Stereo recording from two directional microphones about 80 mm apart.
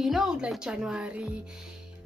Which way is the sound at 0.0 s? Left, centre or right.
Centre.